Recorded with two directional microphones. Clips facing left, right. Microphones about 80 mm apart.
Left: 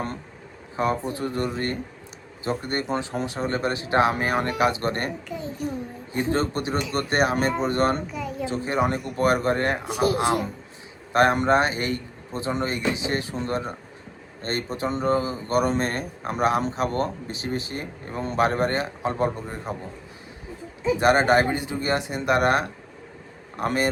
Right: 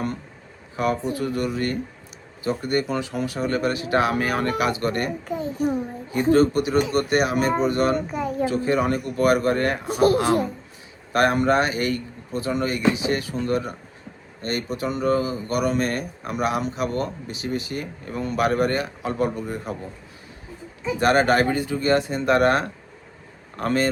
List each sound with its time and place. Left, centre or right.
0.8 s speech: left
8.0 s a sound: right
8.4 s speech: left
9.8 s speech: right
11.1 s speech: left
21.0 s speech: left